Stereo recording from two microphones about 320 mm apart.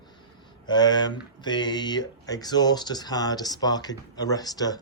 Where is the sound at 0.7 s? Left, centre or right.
Centre.